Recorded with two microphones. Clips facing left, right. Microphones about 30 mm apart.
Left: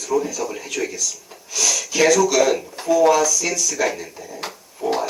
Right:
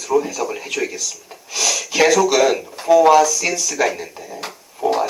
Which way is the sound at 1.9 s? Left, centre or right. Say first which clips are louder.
Right 2 dB; centre.